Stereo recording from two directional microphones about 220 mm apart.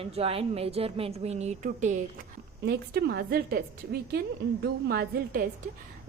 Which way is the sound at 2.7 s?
45° right (ahead or behind).